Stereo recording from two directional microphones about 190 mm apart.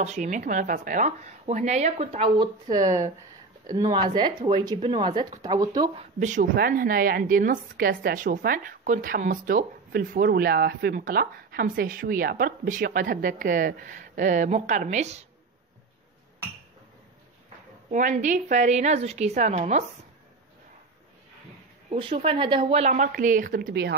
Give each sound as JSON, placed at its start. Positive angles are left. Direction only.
{"t": 0.0, "sound": "speech", "side_deg": -40}
{"t": 5.9, "sound": "a woman's voice", "side_deg": -40}
{"t": 17.9, "sound": "speech", "side_deg": -40}
{"t": 21.9, "sound": "speech", "side_deg": -30}